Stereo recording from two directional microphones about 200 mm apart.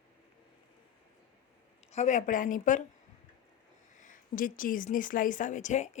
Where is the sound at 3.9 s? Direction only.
40° left (ahead or behind).